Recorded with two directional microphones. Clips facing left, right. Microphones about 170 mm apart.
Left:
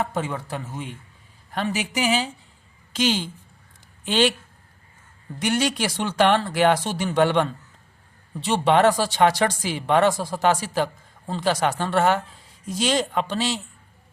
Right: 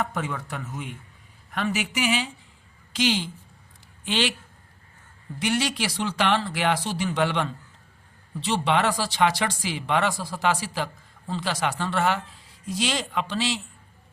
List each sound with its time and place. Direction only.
0.0 s a woman's voice: 30° left (ahead or behind); by 4.3 s 45° left (ahead or behind)
5.4 s speech: 45° left (ahead or behind)